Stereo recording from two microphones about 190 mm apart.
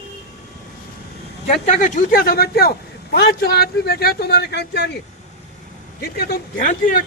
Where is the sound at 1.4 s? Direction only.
40° left (ahead or behind); by 4.9 s 60° left (ahead or behind).